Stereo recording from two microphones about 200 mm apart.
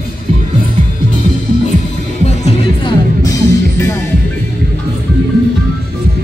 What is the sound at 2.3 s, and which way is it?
Music, 35° left (ahead or behind).